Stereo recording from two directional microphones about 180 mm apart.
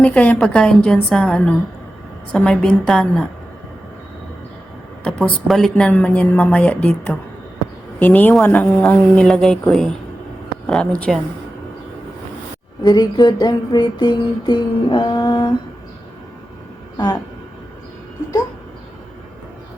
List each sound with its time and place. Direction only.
0.0 s a woman's voice: 5° left (ahead or behind)
5.5 s a woman's voice: centre (ahead or behind)
12.8 s a sound: 20° left (ahead or behind)